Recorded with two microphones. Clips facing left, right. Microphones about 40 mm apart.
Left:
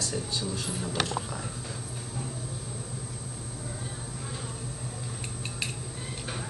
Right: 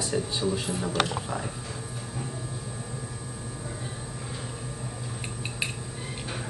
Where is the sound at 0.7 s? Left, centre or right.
Centre.